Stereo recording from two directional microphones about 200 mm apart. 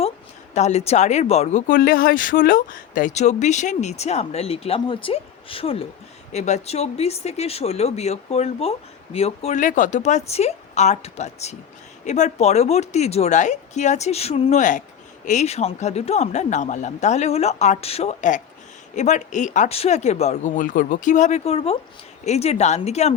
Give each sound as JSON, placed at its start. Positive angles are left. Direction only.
{"t": 0.5, "sound": "a woman's voice", "side_deg": 35}